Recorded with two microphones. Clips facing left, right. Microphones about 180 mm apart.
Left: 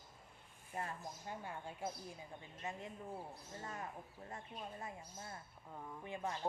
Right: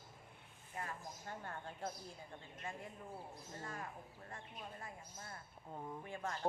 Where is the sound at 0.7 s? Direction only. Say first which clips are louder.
Left 3 dB; 30° left (ahead or behind).